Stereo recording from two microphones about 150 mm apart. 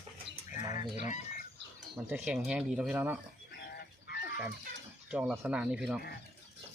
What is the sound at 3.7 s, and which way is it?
Chicken, 90° left.